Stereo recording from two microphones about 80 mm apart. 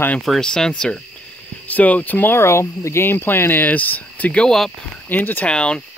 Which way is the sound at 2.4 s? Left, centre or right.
Left.